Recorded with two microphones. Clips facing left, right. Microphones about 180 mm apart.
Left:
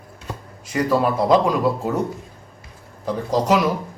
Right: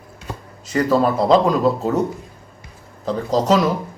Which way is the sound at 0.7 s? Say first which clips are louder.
Right 2 dB; 10° left (ahead or behind).